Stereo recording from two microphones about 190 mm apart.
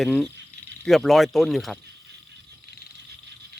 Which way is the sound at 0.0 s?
Centre (ahead or behind).